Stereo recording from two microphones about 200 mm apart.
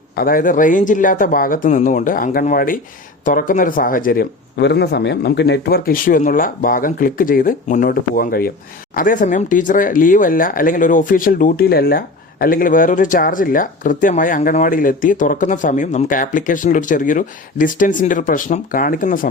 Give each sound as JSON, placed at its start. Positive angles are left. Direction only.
{"t": 0.2, "sound": "speech", "side_deg": 45}